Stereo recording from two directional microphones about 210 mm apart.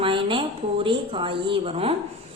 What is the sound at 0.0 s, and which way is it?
A woman's voice, 25° right (ahead or behind).